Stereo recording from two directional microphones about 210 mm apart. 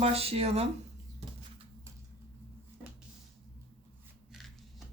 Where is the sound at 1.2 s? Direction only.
30° right (ahead or behind).